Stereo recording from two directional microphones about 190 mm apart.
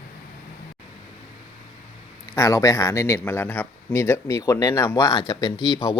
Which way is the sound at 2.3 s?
15° left (ahead or behind).